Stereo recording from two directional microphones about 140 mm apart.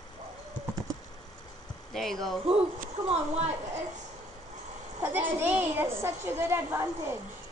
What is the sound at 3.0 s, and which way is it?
Speech, 50° right (ahead or behind).